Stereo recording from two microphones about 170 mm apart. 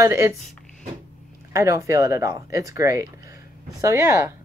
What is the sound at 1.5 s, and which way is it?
Speech, 20° right (ahead or behind).